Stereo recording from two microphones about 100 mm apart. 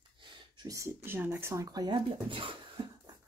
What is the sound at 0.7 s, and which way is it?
Speech, 30° right (ahead or behind).